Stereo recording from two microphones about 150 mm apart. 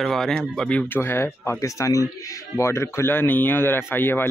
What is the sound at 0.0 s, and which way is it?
Speech, centre (ahead or behind).